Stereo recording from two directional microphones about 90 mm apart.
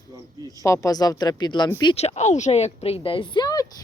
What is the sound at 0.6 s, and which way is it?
Speech, 35° left (ahead or behind).